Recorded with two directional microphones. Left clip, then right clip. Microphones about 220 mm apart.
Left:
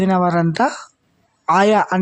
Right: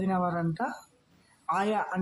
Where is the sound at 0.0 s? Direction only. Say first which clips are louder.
Left 13 dB; 40° left (ahead or behind).